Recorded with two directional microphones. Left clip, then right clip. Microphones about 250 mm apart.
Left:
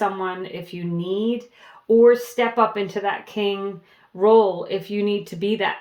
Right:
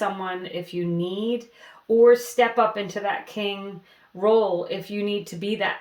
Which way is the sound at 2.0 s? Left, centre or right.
Left.